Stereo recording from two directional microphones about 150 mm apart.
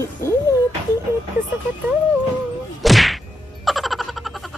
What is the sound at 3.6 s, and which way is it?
Frog, centre (ahead or behind).